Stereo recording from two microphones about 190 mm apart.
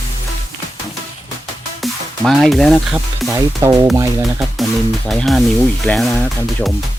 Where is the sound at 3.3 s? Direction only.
15° right (ahead or behind).